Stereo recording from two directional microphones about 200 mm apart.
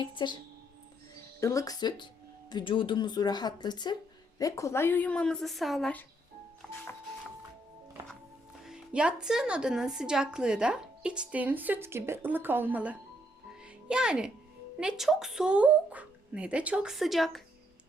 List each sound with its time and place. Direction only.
0.0 s speech: 25° left (ahead or behind)
1.4 s speech: 15° left (ahead or behind)
6.6 s music: 5° left (ahead or behind)
8.6 s speech: 5° right (ahead or behind)